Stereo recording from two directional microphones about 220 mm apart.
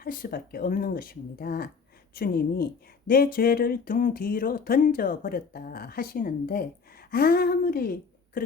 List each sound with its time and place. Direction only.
0.0 s speech: 40° left (ahead or behind)